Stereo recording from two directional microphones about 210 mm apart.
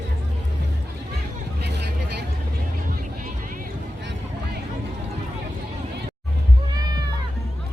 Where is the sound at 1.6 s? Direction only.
50° right (ahead or behind).